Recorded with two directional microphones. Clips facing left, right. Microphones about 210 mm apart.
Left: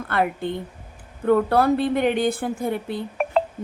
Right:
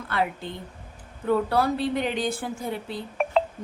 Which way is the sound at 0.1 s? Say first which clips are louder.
Left 5 dB; 55° left (ahead or behind).